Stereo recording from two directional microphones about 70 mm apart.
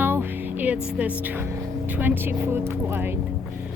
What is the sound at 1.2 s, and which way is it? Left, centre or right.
Speech, right.